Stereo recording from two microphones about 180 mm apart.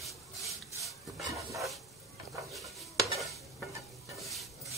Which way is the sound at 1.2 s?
15° right (ahead or behind).